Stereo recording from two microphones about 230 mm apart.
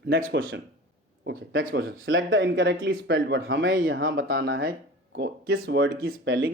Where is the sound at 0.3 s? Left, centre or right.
Right.